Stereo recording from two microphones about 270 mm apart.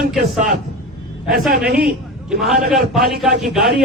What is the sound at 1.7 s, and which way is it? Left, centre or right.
Speech, right.